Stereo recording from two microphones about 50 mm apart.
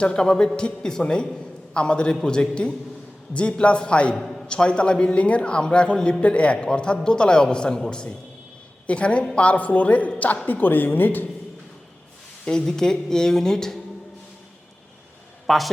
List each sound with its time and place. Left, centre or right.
0.0 s a man's voice: centre
4.1 s a man's voice: centre
4.4 s a man's voice: centre; by 11.3 s left
12.5 s a man's voice: centre
15.4 s a man's voice: centre